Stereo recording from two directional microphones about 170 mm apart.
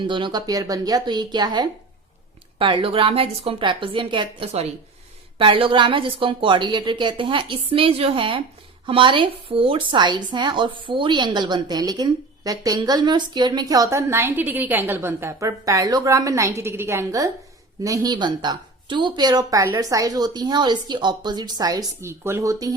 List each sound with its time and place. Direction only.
0.1 s a woman's voice: 25° right (ahead or behind)